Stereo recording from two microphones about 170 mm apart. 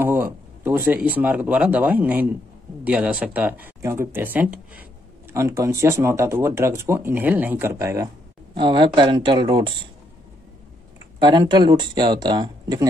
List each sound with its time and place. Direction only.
0.0 s speech: 15° right (ahead or behind)
8.5 s speech: 30° right (ahead or behind)
11.1 s speech: 25° right (ahead or behind)